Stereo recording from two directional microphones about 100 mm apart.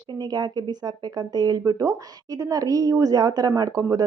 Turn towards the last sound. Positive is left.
turn(degrees=-40)  # may be behind; listen again after turning